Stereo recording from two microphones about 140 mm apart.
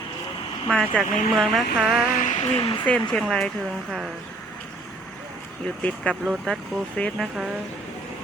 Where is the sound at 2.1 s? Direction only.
65° left (ahead or behind).